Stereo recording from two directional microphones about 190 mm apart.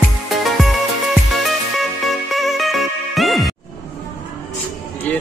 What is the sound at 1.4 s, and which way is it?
Music, centre (ahead or behind).